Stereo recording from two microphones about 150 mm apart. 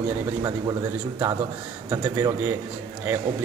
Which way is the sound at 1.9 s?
20° right (ahead or behind).